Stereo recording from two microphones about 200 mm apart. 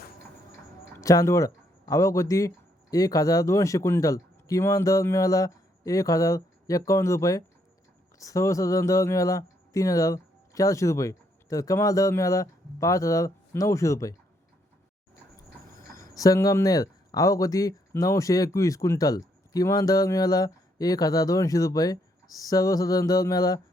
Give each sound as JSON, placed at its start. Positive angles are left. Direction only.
{"t": 0.9, "sound": "speech", "side_deg": 15}
{"t": 16.0, "sound": "speech", "side_deg": 15}